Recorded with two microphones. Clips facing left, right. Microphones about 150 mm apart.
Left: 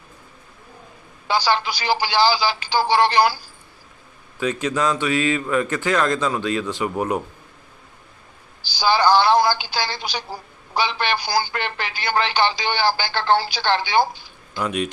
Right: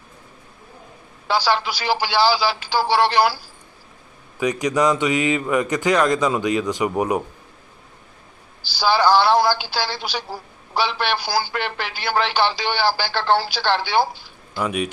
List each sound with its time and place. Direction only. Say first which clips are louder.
1.3 s speech: even; centre (ahead or behind)
4.4 s speech: right 3 dB; 15° right (ahead or behind)
8.7 s speech: even; 5° right (ahead or behind)